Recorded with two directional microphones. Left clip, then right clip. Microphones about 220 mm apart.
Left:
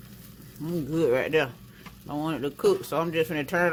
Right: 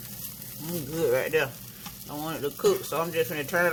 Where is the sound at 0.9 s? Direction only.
30° left (ahead or behind).